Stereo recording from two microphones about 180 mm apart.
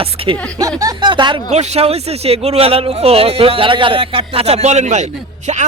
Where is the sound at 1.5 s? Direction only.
40° right (ahead or behind).